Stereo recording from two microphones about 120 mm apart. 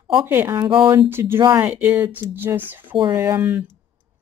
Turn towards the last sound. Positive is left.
turn(degrees=-15)  # may be behind; listen again after turning